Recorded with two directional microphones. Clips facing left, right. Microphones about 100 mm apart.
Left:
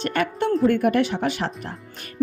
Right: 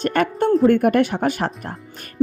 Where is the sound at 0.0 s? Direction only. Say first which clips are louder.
Right 4 dB; 45° right (ahead or behind).